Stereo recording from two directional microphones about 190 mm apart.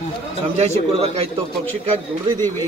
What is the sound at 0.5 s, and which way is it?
Speech, 30° right (ahead or behind).